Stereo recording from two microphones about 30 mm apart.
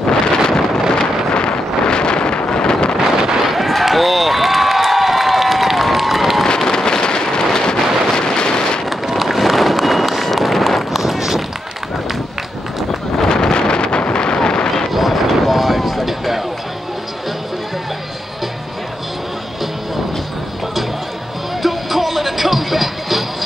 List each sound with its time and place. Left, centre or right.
0.0 s wind noise: left
1.3 s wind noise: left
3.4 s a sound: centre
3.8 s crowd: centre
6.7 s a sound: left
7.6 s wind noise: left
9.0 s run: centre
13.3 s wind noise: left
14.1 s a sound: left
14.9 s vehicle: centre
21.6 s music: centre